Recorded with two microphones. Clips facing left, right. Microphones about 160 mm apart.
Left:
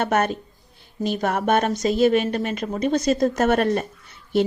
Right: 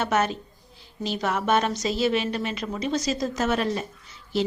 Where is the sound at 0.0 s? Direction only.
55° left (ahead or behind).